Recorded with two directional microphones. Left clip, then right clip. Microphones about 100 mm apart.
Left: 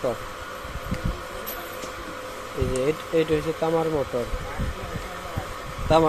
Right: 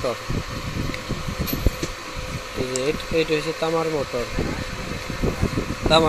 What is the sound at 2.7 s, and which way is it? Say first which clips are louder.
Speech: even; 15° left (ahead or behind).